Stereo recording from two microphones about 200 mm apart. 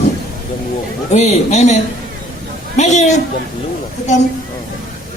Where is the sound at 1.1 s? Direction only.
35° left (ahead or behind).